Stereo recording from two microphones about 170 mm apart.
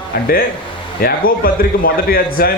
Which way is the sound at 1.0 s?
60° left (ahead or behind).